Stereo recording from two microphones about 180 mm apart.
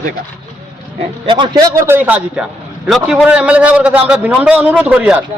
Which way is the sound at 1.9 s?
10° right (ahead or behind).